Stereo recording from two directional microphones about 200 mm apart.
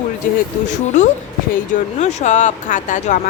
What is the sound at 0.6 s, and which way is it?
Speech, 35° left (ahead or behind).